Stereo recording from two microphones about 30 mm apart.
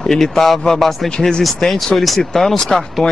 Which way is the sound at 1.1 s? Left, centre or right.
Left.